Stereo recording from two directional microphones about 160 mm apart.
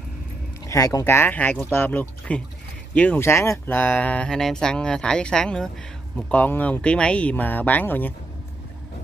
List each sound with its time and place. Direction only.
0.7 s speech: 20° left (ahead or behind)